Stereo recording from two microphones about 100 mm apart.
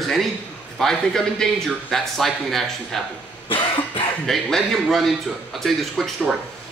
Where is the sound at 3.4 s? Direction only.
60° left (ahead or behind).